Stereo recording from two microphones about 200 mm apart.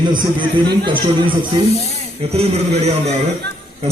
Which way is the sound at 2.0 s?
30° right (ahead or behind).